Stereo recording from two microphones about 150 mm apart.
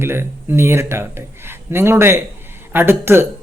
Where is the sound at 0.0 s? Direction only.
15° right (ahead or behind).